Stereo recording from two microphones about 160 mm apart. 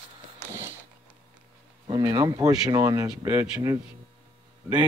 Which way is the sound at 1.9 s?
25° right (ahead or behind).